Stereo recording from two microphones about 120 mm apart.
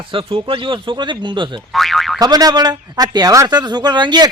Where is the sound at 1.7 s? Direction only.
Centre (ahead or behind).